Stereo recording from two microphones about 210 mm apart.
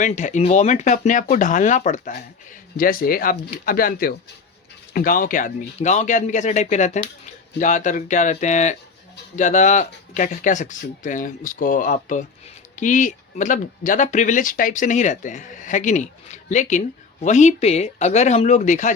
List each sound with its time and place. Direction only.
0.0 s speech: 35° left (ahead or behind)